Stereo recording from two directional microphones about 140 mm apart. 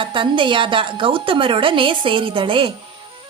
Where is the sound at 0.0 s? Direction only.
35° right (ahead or behind).